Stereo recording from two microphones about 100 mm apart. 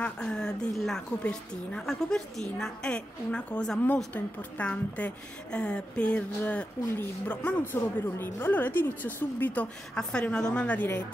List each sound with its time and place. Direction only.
0.0 s a woman's voice: 5° left (ahead or behind)